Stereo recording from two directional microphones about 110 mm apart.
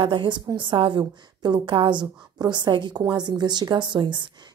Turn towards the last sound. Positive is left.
turn(degrees=-45)  # may be behind; listen again after turning